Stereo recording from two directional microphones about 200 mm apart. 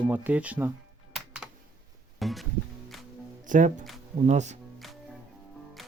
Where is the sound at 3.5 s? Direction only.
40° right (ahead or behind).